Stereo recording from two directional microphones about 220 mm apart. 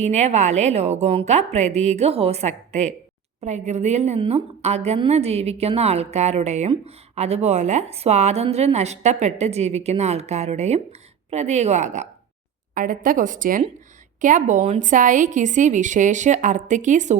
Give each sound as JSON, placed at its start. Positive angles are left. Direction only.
{"t": 0.0, "sound": "a woman's voice", "side_deg": -30}